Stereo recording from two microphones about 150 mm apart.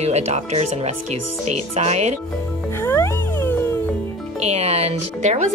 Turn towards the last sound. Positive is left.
turn(degrees=-45)  # may be behind; listen again after turning